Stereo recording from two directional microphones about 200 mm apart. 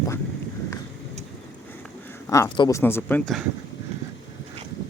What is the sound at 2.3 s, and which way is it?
Speech, 15° left (ahead or behind).